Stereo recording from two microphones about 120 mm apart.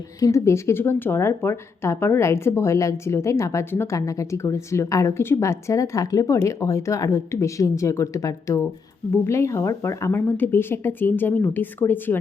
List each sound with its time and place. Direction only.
0.2 s a woman's voice: 25° left (ahead or behind)